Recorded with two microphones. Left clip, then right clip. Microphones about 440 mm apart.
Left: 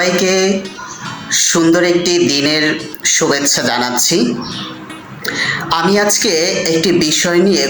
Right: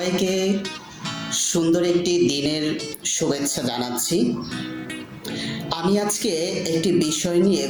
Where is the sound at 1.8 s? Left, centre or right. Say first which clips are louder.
Left 8 dB; right.